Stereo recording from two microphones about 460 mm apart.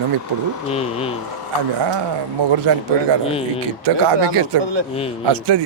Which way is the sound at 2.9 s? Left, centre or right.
Right.